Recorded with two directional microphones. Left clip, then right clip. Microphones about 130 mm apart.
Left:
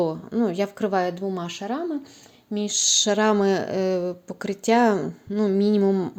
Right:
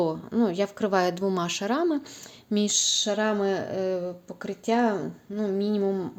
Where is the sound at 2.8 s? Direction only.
30° left (ahead or behind).